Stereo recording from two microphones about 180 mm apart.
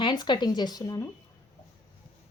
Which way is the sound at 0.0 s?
25° left (ahead or behind).